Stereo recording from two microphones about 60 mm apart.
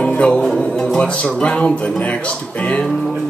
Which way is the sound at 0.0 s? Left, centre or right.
Centre.